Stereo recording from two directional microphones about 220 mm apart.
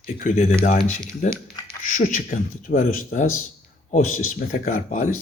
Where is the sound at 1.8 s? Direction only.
35° left (ahead or behind).